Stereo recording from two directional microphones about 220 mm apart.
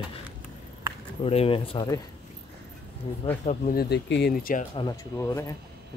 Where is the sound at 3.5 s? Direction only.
40° left (ahead or behind).